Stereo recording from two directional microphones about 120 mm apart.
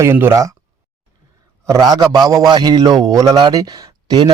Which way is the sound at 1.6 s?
30° right (ahead or behind).